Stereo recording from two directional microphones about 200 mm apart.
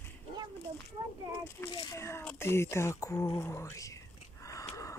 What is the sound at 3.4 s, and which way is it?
Whispering, 15° left (ahead or behind).